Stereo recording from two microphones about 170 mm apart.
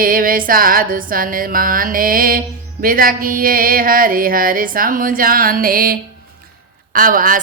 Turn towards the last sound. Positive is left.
turn(degrees=-55)  # may be behind; listen again after turning